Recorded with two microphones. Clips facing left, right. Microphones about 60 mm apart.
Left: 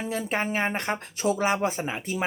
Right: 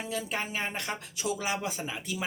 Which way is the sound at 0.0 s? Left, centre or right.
Left.